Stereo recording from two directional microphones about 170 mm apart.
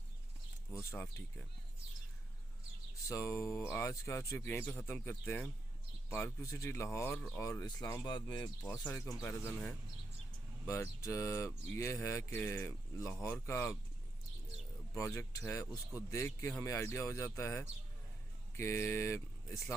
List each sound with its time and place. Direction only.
0.7 s speech: 15° left (ahead or behind)
3.1 s speech: 15° left (ahead or behind)
10.7 s speech: 15° left (ahead or behind)
14.9 s speech: 15° left (ahead or behind)